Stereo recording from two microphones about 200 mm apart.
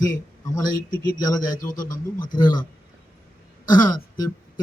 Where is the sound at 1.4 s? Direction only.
40° left (ahead or behind).